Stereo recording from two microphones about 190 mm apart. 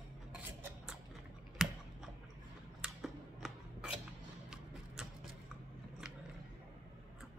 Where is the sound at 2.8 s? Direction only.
Centre (ahead or behind).